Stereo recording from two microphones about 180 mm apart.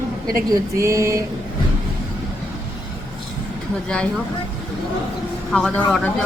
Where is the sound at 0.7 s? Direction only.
15° right (ahead or behind).